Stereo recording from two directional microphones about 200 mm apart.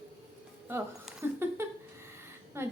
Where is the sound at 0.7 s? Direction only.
10° right (ahead or behind).